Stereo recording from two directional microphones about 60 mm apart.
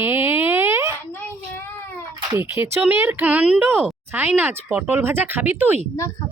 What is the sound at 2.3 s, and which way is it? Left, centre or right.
Speech, right.